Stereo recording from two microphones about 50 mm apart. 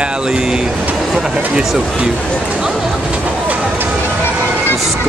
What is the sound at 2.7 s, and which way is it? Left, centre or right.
Vehicle, centre.